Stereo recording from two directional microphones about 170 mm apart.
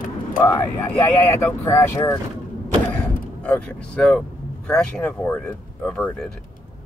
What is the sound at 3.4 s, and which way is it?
Speech, 5° left (ahead or behind).